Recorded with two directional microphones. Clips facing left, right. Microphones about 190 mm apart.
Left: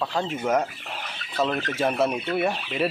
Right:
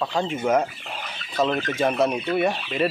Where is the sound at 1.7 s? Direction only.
Centre (ahead or behind).